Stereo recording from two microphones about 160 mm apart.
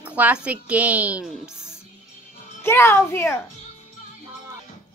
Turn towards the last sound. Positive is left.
turn(degrees=15)  # may be behind; listen again after turning